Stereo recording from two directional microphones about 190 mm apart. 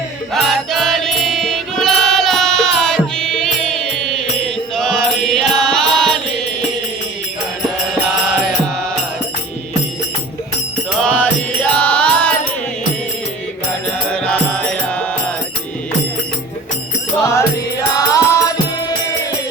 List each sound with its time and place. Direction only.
0.3 s music: centre (ahead or behind)
4.7 s chant: 5° left (ahead or behind)
11.0 s music: 10° left (ahead or behind)
14.1 s music: 5° left (ahead or behind)
17.9 s music: 20° left (ahead or behind)